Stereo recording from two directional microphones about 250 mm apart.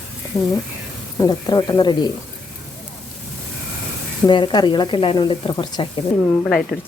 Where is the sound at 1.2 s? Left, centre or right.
Centre.